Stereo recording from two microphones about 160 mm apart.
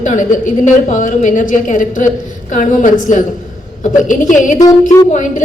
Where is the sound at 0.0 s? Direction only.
50° left (ahead or behind).